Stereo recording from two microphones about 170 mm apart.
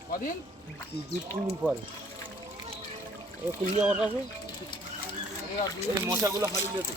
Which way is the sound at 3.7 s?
5° right (ahead or behind).